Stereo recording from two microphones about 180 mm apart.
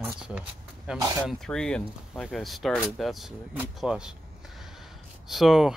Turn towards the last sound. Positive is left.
turn(degrees=0)  # may be behind; listen again after turning